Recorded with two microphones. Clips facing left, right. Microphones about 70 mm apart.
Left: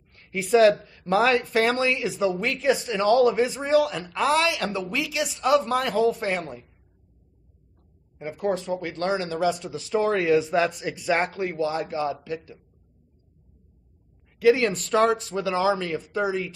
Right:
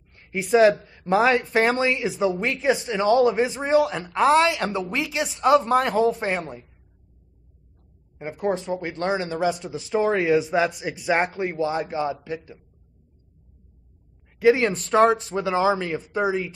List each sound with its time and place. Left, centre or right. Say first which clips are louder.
0.1 s a sound: right 1 dB; centre
0.8 s speech: right 2 dB; right
8.2 s speech: right 1 dB; right
14.4 s speech: right 1 dB; right